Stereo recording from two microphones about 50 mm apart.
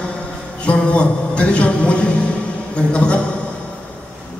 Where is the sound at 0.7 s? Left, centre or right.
Left.